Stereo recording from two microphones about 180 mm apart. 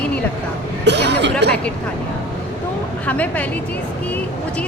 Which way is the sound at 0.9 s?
75° right (ahead or behind).